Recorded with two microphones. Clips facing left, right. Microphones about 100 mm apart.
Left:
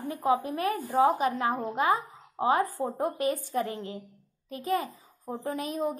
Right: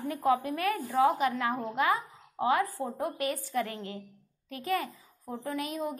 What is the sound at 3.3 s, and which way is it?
A woman's voice, 15° left (ahead or behind).